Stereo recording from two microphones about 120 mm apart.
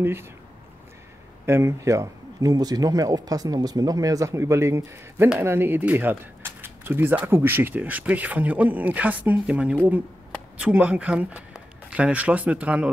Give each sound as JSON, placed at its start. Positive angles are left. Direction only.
{"t": 0.0, "sound": "a man's voice", "side_deg": -20}
{"t": 1.4, "sound": "a man's voice", "side_deg": -20}